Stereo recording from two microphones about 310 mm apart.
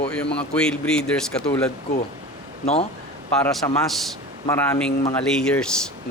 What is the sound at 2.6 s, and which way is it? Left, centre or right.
Speech, centre.